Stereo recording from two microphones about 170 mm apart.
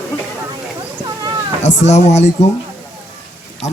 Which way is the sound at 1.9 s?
40° left (ahead or behind).